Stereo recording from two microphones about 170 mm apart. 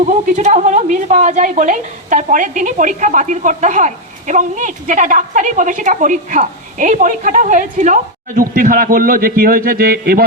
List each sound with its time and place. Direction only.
0.0 s a woman's voice: 40° right (ahead or behind); by 10.2 s 60° right (ahead or behind)